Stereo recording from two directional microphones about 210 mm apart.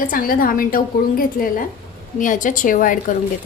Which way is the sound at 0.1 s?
40° left (ahead or behind).